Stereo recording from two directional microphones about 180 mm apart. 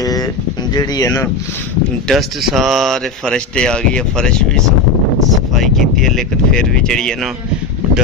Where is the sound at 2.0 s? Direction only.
Centre (ahead or behind).